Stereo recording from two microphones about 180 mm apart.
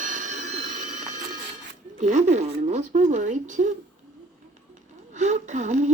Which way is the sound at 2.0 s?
45° right (ahead or behind).